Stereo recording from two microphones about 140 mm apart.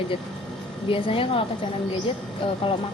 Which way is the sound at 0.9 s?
40° left (ahead or behind).